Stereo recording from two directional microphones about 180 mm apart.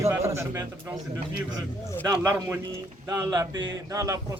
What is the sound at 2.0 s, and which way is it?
A man's voice, 15° right (ahead or behind).